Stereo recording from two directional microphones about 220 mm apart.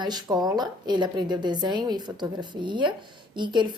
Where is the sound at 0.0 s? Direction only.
20° right (ahead or behind).